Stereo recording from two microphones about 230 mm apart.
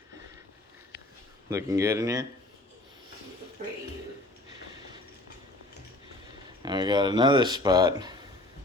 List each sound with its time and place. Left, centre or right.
0.9 s a sound: left
1.5 s speech: centre
6.6 s speech: centre